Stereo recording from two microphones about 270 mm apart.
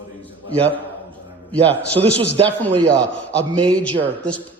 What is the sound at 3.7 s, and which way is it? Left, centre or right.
Speech, centre.